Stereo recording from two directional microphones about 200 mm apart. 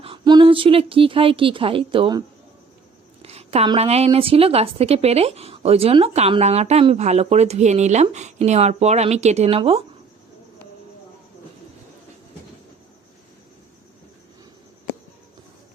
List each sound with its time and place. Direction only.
0.0 s a woman's voice: 25° right (ahead or behind)